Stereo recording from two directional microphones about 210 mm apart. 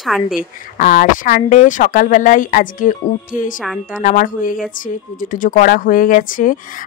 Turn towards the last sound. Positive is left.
turn(degrees=40)  # may be behind; listen again after turning